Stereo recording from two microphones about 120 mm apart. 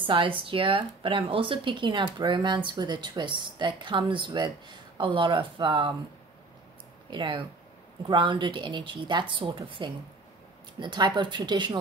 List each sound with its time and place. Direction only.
0.0 s speech: 45° right (ahead or behind)
7.1 s speech: 45° right (ahead or behind)